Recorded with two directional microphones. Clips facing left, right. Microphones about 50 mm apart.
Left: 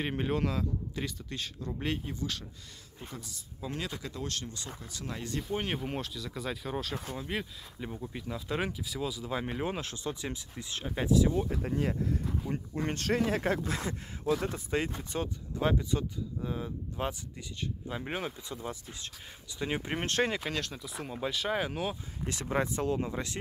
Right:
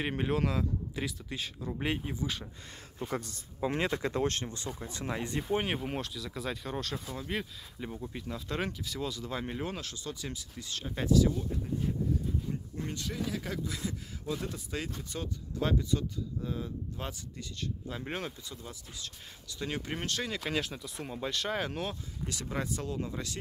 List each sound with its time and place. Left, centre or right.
0.0 s a man's voice: centre
3.1 s speech: right
3.6 s speech: right
5.7 s a man's voice: centre
9.8 s speech: left
11.5 s speech: left
12.4 s speech: left
13.2 s speech: left
14.4 s speech: left; by 18.3 s centre
18.5 s speech: left
20.1 s speech: left
20.4 s a man's voice: centre
22.2 s speech: left